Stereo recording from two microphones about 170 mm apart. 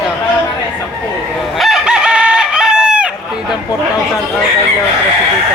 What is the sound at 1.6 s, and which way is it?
Chicken, 5° right (ahead or behind).